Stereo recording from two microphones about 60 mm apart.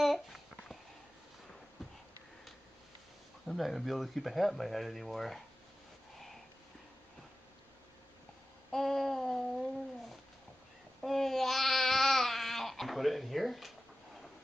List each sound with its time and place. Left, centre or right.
0.0 s a sound: centre
3.4 s speech: centre
8.7 s babbling: centre
11.0 s babbling: centre